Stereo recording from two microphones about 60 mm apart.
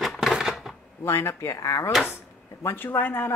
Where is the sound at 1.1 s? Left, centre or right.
Left.